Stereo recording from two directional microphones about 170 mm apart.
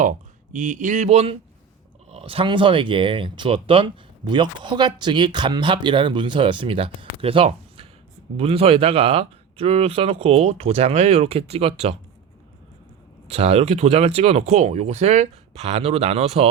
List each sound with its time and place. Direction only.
0.5 s speech: 45° right (ahead or behind)
13.2 s speech: 35° right (ahead or behind)